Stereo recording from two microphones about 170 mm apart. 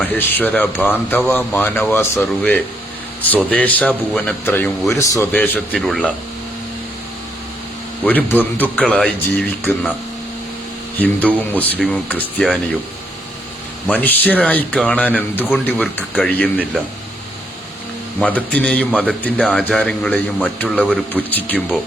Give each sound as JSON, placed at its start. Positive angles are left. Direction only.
{"t": 0.0, "sound": "speech", "side_deg": 10}
{"t": 4.9, "sound": "speech", "side_deg": 20}
{"t": 5.3, "sound": "a man's voice", "side_deg": 5}
{"t": 8.0, "sound": "speech", "side_deg": 10}
{"t": 11.0, "sound": "speech", "side_deg": 10}
{"t": 13.8, "sound": "speech", "side_deg": 10}
{"t": 18.2, "sound": "speech", "side_deg": 10}